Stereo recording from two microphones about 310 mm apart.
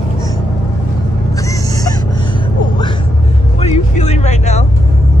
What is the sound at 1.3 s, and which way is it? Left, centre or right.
Gasp, centre.